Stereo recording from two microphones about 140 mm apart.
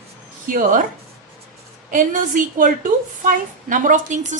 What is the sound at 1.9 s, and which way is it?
A woman's voice, 75° right (ahead or behind).